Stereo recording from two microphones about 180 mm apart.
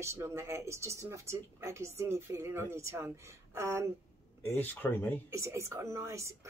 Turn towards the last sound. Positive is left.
turn(degrees=-15)  # may be behind; listen again after turning